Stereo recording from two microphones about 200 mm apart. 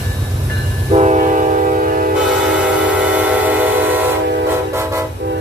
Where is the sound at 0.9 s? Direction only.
35° right (ahead or behind).